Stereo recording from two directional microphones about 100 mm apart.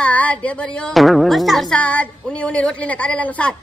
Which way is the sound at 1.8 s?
15° left (ahead or behind).